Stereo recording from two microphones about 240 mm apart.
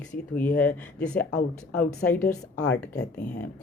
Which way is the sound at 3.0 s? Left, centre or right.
Left.